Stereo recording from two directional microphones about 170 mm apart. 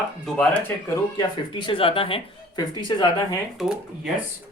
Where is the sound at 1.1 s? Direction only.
30° left (ahead or behind).